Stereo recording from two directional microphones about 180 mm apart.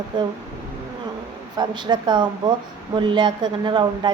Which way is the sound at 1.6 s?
25° right (ahead or behind).